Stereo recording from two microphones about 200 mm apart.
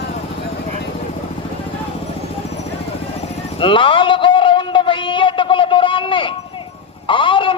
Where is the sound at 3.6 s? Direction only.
25° left (ahead or behind).